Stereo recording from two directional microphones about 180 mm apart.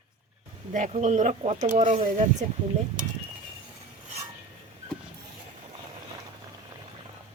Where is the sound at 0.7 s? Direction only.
45° right (ahead or behind).